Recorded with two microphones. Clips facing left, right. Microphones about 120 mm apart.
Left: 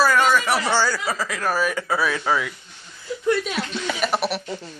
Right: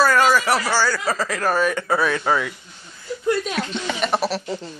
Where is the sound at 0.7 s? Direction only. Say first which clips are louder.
Even; 20° left (ahead or behind).